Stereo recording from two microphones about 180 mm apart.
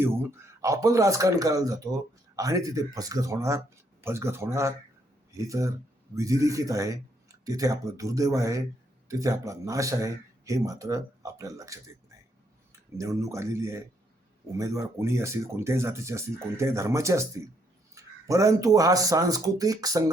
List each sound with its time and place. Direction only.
0.0 s speech: 15° right (ahead or behind)
13.0 s speech: 15° right (ahead or behind)